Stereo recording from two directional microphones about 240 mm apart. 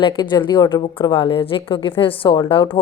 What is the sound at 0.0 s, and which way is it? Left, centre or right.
Speech, centre.